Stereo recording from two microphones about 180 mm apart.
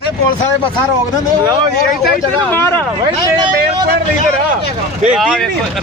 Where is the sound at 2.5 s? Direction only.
15° left (ahead or behind).